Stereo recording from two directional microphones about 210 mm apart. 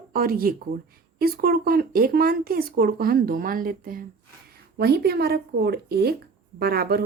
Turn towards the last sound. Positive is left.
turn(degrees=-50)  # may be behind; listen again after turning